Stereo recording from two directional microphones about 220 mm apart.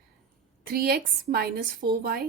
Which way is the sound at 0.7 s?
40° right (ahead or behind).